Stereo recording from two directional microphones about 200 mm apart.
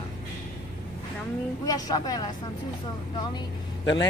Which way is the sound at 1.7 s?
20° left (ahead or behind).